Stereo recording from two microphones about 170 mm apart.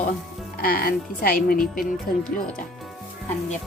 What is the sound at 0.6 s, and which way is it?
Speech, 60° left (ahead or behind).